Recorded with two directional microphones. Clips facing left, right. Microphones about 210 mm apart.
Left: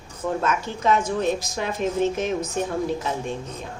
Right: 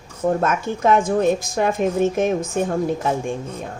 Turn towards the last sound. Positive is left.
turn(degrees=-50)  # may be behind; listen again after turning